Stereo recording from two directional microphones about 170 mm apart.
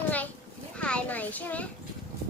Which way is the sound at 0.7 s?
5° left (ahead or behind).